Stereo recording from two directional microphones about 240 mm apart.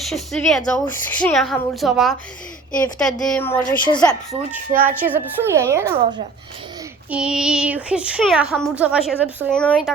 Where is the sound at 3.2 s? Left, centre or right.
Centre.